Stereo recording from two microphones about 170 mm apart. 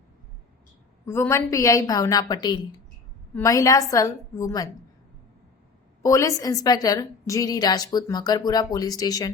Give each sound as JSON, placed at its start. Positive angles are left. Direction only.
{"t": 1.0, "sound": "a woman's voice", "side_deg": 15}
{"t": 6.0, "sound": "a woman's voice", "side_deg": 20}